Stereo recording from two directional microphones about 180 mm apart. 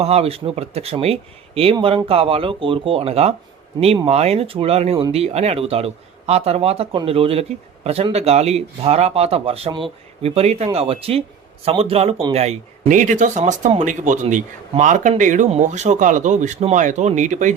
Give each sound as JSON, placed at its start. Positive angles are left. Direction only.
{"t": 0.0, "sound": "a man's voice", "side_deg": -35}